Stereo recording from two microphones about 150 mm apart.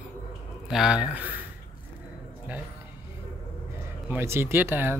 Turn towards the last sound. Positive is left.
turn(degrees=-15)  # may be behind; listen again after turning